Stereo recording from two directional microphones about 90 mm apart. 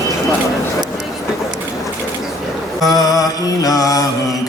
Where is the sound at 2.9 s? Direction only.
45° left (ahead or behind).